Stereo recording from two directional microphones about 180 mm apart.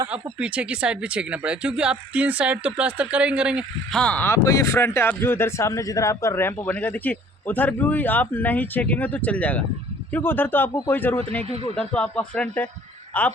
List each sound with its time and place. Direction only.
0.1 s speech: 5° right (ahead or behind)
4.0 s speech: 10° left (ahead or behind)
11.4 s speech: 35° right (ahead or behind)
11.8 s speech: 5° left (ahead or behind)